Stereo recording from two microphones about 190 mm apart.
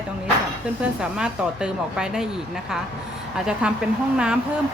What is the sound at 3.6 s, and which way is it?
Speech, 5° right (ahead or behind).